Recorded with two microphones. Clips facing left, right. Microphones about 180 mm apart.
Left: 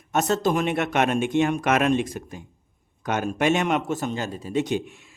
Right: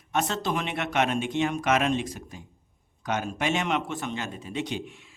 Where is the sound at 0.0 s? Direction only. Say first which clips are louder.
Left 6 dB; 45° left (ahead or behind).